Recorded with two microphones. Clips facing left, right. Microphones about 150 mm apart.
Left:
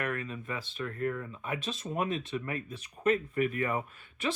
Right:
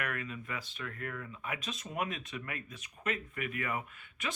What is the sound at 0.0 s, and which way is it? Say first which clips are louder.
Speech: left 4 dB; 30° left (ahead or behind).